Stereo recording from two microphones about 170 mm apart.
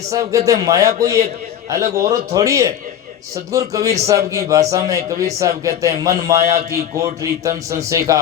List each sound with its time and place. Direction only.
0.1 s speech: 20° right (ahead or behind)